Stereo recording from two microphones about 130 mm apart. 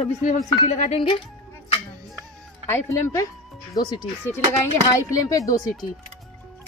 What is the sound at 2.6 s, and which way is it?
Speech, 20° left (ahead or behind).